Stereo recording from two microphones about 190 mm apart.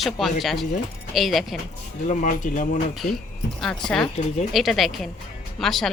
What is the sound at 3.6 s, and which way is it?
Speech, 5° left (ahead or behind).